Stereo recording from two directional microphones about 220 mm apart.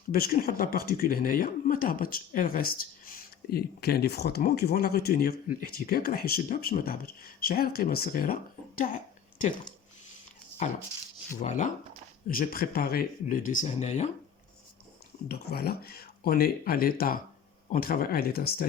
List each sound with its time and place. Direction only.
0.1 s speech: 40° left (ahead or behind)
11.4 s speech: 35° left (ahead or behind)
15.3 s speech: 45° left (ahead or behind)